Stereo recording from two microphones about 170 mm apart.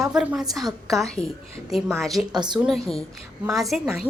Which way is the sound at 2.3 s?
25° right (ahead or behind).